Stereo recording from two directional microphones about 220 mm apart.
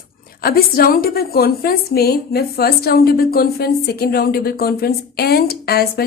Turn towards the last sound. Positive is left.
turn(degrees=45)  # may be behind; listen again after turning